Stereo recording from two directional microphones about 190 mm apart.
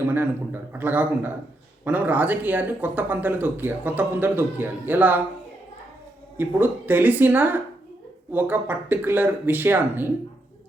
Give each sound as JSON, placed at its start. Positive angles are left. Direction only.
{"t": 0.1, "sound": "speech", "side_deg": -10}
{"t": 6.3, "sound": "speech", "side_deg": -10}